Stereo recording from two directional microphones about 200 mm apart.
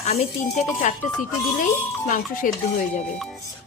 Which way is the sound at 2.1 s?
40° left (ahead or behind).